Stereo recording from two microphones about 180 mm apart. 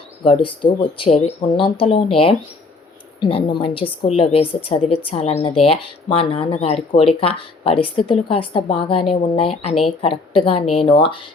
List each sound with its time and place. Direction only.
0.3 s speech: 30° left (ahead or behind)
3.2 s speech: 30° left (ahead or behind)